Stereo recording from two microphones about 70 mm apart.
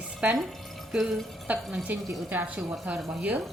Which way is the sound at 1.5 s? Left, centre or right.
Right.